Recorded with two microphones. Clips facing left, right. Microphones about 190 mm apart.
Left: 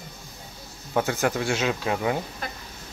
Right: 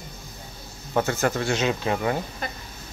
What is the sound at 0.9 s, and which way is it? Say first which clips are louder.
Speech: right 1 dB; 10° left (ahead or behind).